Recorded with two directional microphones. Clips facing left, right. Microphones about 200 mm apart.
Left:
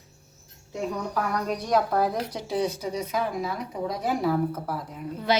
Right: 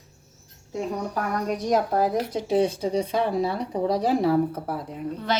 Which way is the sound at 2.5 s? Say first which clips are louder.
Right 6 dB; 25° right (ahead or behind).